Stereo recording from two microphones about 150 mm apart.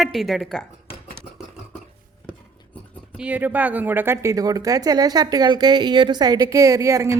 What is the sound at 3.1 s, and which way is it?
Speech, 10° right (ahead or behind).